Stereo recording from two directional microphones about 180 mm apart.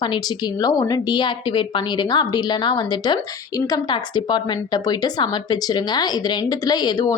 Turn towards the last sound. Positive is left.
turn(degrees=20)  # may be behind; listen again after turning